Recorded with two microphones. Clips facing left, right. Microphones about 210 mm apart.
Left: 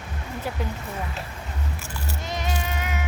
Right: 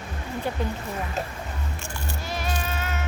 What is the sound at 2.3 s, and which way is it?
Music, 20° left (ahead or behind).